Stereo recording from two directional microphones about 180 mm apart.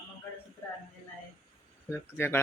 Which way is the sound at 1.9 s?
15° left (ahead or behind).